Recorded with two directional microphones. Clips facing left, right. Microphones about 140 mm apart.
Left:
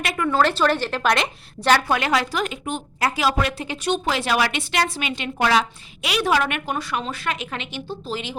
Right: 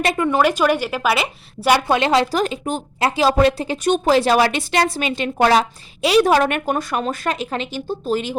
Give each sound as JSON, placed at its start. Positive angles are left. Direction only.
{"t": 0.0, "sound": "a woman's voice", "side_deg": -30}
{"t": 0.3, "sound": "a woman's voice", "side_deg": -15}
{"t": 1.9, "sound": "a woman's voice", "side_deg": -25}